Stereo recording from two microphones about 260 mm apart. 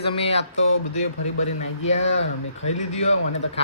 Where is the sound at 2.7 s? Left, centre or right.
Left.